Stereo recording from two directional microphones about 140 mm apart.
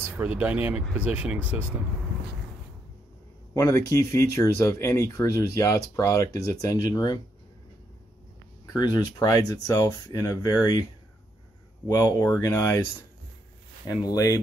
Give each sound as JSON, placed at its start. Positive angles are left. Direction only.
{"t": 0.0, "sound": "speech", "side_deg": -10}
{"t": 3.5, "sound": "speech", "side_deg": 20}
{"t": 8.7, "sound": "speech", "side_deg": 30}
{"t": 11.9, "sound": "speech", "side_deg": 25}
{"t": 13.8, "sound": "speech", "side_deg": 25}